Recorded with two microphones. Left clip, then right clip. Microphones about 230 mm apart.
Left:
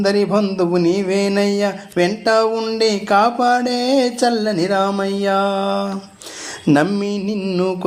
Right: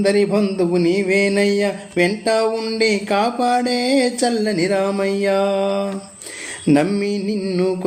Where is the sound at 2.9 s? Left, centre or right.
Centre.